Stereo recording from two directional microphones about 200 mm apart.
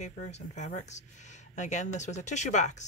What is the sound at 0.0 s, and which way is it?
Speech, 35° left (ahead or behind).